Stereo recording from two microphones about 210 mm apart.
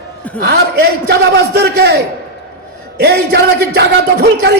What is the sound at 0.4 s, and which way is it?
Crowd, 50° right (ahead or behind).